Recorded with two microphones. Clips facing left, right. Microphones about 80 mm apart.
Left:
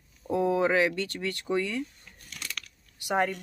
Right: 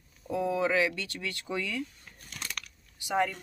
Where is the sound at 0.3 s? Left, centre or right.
Left.